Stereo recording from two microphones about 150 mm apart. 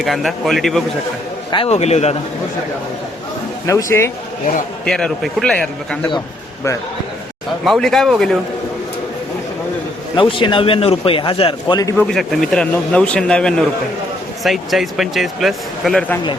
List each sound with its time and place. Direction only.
0.0 s a man's voice: centre (ahead or behind)
1.5 s a man's voice: 35° left (ahead or behind)
1.7 s a man's voice: 45° left (ahead or behind)
3.7 s speech: 20° left (ahead or behind)
4.9 s a man's voice: 5° left (ahead or behind)
7.6 s a man's voice: centre (ahead or behind)
10.2 s a man's voice: 35° left (ahead or behind)
11.9 s a man's voice: 5° left (ahead or behind)